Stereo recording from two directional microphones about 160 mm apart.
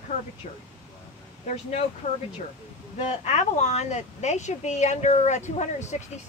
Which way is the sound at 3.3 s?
45° left (ahead or behind).